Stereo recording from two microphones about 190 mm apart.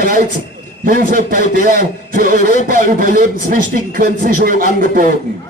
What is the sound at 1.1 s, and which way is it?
Speech, 45° right (ahead or behind).